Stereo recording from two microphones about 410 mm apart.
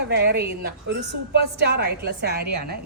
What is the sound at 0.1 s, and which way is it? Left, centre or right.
A woman's voice, right.